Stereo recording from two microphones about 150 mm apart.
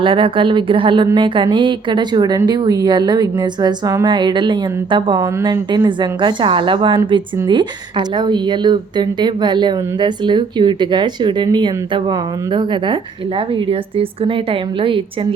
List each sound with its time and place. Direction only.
0.0 s a woman's voice: 35° right (ahead or behind)